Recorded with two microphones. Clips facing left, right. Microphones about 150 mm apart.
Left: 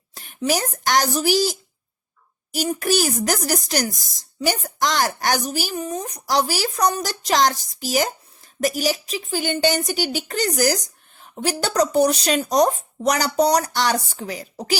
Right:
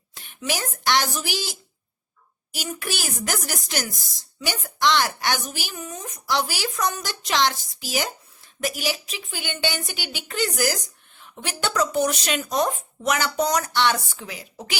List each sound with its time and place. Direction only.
0.1 s speech: 40° left (ahead or behind)